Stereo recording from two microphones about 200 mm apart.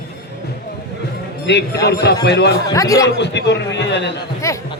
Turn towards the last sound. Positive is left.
turn(degrees=15)  # may be behind; listen again after turning